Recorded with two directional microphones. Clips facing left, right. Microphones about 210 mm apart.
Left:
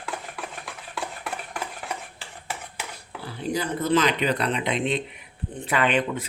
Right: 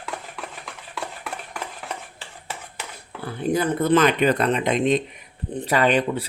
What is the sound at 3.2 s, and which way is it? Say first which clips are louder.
Speech: right 6 dB; 55° right (ahead or behind).